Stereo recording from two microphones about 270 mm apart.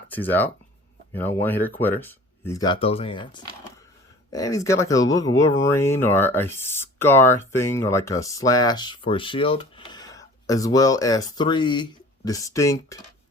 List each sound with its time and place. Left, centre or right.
0.1 s speech: centre